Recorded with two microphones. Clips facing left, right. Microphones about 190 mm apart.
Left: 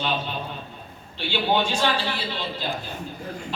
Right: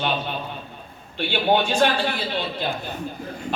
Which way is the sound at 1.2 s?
55° right (ahead or behind).